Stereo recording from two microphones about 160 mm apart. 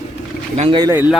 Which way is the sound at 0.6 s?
30° right (ahead or behind).